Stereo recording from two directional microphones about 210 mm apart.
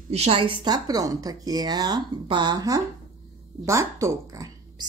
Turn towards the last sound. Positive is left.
turn(degrees=-15)  # may be behind; listen again after turning